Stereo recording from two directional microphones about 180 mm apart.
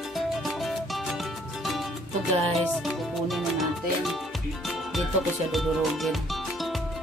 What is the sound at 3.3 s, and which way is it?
Music, centre (ahead or behind).